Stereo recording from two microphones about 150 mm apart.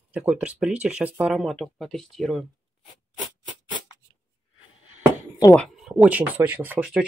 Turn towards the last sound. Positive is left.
turn(degrees=-10)  # may be behind; listen again after turning